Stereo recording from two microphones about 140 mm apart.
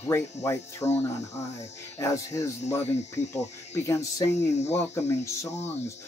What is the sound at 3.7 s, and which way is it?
Speech, 20° left (ahead or behind).